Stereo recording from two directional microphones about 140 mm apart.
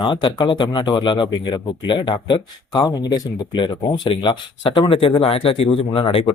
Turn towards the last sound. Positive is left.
turn(degrees=40)  # may be behind; listen again after turning